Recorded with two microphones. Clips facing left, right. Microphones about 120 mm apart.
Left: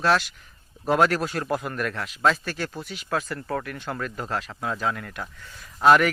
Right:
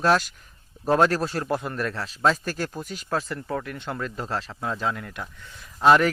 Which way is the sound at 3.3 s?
15° right (ahead or behind).